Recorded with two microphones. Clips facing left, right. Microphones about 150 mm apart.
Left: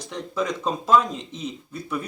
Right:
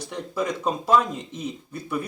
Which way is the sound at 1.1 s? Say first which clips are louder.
Even; 55° right (ahead or behind).